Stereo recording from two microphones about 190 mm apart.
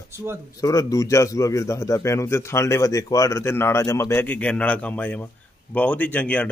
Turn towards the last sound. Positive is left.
turn(degrees=10)  # may be behind; listen again after turning